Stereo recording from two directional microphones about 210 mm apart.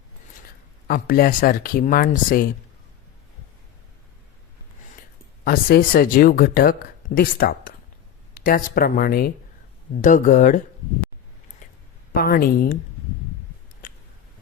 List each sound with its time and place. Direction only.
0.9 s speech: 45° left (ahead or behind)
5.5 s speech: 45° left (ahead or behind)
12.1 s speech: 45° left (ahead or behind)